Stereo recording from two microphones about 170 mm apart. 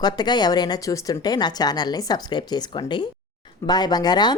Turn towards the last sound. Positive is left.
turn(degrees=25)  # may be behind; listen again after turning